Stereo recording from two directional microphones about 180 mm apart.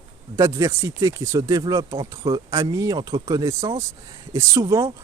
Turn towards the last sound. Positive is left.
turn(degrees=-15)  # may be behind; listen again after turning